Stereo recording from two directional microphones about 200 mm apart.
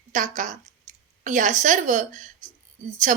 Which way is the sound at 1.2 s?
40° right (ahead or behind).